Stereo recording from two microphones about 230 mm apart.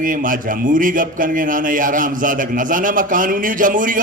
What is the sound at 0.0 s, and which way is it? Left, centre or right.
A man's voice, right.